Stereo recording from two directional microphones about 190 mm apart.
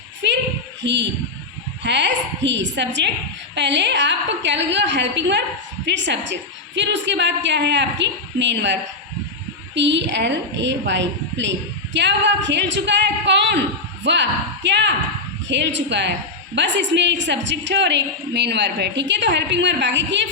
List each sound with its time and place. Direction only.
1.8 s a woman's voice: 65° right (ahead or behind)